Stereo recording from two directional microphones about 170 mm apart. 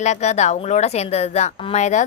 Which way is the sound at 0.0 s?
45° left (ahead or behind).